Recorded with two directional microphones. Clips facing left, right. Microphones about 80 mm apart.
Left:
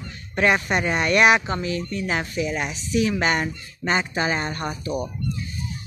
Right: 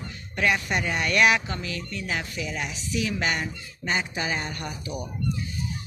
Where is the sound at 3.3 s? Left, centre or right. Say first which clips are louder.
Left 6 dB; left.